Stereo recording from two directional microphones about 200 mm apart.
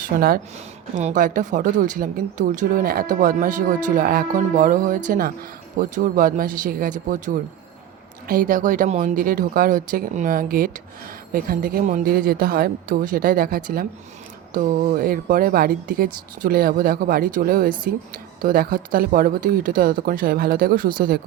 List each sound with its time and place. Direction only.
0.0 s a woman's voice: 50° right (ahead or behind)